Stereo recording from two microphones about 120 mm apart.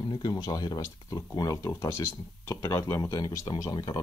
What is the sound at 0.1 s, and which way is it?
Speech, 35° left (ahead or behind).